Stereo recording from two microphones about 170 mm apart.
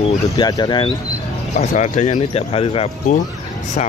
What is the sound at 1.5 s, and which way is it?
Speech, 45° left (ahead or behind).